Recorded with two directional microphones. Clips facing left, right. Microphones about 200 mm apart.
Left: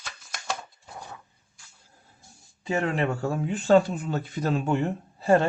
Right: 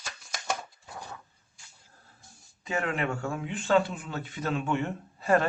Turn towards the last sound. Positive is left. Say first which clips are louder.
# left 4 dB
turn(degrees=30)  # may be behind; listen again after turning